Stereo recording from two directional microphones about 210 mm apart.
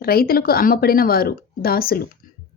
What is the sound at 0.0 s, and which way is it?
A woman's voice, 45° left (ahead or behind).